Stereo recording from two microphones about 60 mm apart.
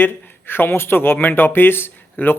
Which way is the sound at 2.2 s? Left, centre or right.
Left.